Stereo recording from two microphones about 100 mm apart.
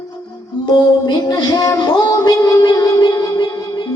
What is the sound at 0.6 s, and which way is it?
Music, 45° left (ahead or behind).